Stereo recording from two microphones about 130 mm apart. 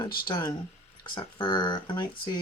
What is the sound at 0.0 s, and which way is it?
Speech, 30° left (ahead or behind).